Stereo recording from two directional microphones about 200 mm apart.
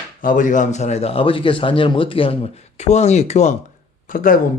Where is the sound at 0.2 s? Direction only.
40° left (ahead or behind).